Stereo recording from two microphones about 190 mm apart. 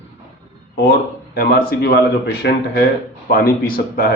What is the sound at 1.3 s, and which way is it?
A man's voice, 55° left (ahead or behind).